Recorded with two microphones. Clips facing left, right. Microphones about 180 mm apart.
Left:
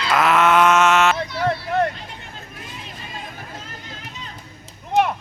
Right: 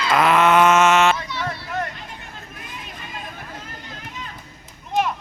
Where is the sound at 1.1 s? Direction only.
60° left (ahead or behind).